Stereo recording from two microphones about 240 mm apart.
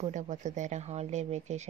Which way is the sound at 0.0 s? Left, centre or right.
Right.